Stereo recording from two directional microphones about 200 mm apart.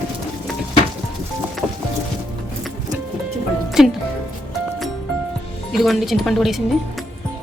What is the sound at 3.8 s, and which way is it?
Speech, centre (ahead or behind).